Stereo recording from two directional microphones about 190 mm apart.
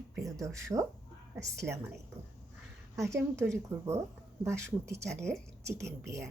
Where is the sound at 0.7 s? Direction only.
15° right (ahead or behind).